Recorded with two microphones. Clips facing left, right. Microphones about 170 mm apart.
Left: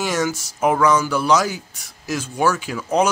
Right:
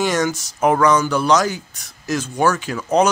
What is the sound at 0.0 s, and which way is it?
Speech, 5° left (ahead or behind).